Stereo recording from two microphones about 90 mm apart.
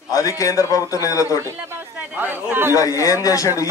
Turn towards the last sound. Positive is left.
turn(degrees=40)  # may be behind; listen again after turning